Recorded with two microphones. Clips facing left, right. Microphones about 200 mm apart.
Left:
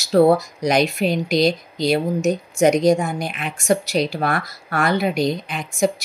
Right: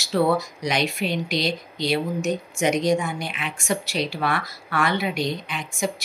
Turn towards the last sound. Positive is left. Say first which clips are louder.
# left 7 dB
turn(degrees=40)  # may be behind; listen again after turning